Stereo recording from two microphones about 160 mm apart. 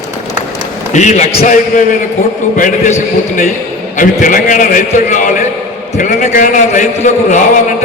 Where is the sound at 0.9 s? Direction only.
45° left (ahead or behind).